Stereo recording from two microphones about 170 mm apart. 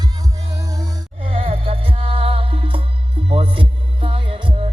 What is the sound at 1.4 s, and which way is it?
Music, 35° right (ahead or behind).